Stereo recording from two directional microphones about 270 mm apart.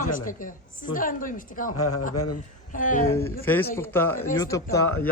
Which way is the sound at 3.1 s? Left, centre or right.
Centre.